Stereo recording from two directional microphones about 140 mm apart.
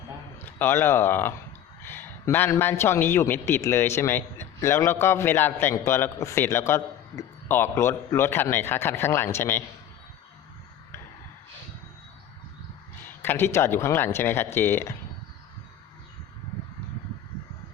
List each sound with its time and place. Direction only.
0.4 s a man's voice: 15° left (ahead or behind)
13.1 s a man's voice: 15° left (ahead or behind)